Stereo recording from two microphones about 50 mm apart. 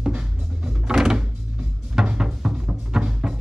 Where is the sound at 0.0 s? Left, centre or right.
Centre.